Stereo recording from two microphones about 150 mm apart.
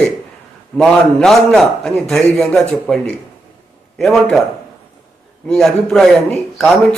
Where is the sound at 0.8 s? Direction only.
Centre (ahead or behind).